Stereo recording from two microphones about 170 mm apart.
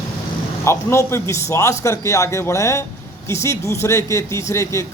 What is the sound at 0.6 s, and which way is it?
A man's voice, 15° left (ahead or behind).